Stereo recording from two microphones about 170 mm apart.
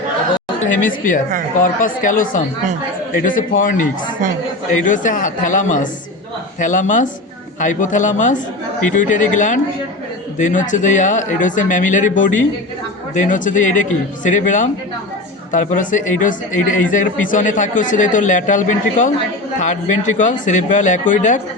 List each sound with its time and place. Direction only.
0.7 s a man's voice: 50° left (ahead or behind)